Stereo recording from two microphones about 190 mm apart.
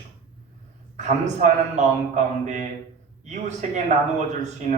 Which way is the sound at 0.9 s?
35° right (ahead or behind).